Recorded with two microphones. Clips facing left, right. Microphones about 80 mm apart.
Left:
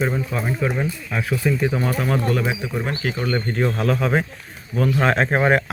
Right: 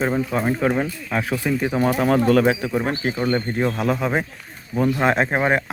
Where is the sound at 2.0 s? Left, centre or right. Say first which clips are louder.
Right 5 dB; right.